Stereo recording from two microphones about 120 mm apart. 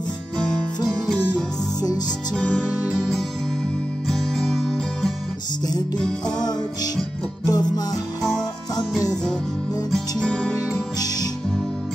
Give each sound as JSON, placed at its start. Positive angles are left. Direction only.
{"t": 0.8, "sound": "music", "side_deg": 5}
{"t": 6.3, "sound": "music", "side_deg": 35}
{"t": 9.8, "sound": "music", "side_deg": 5}
{"t": 10.7, "sound": "music", "side_deg": 30}